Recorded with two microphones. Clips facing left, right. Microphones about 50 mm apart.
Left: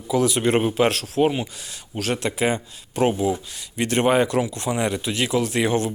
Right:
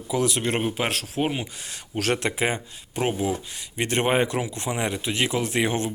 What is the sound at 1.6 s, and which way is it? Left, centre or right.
Speech, right.